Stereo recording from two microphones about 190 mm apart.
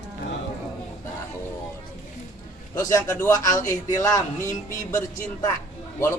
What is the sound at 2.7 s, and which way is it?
A man's voice, 15° left (ahead or behind).